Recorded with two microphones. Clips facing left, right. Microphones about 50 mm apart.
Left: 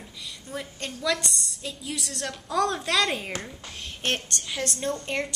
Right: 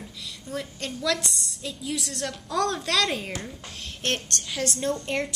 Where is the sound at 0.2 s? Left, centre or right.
Centre.